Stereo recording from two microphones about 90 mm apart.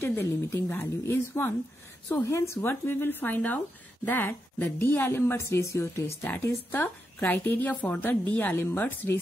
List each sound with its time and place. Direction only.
0.0 s speech: 25° left (ahead or behind)